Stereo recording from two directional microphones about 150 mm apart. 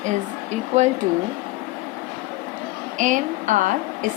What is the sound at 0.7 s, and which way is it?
Speech, 50° right (ahead or behind).